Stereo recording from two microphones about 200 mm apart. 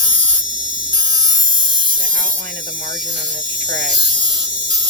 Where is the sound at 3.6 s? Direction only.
60° right (ahead or behind).